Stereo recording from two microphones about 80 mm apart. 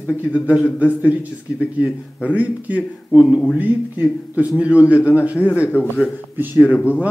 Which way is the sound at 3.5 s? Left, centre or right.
Right.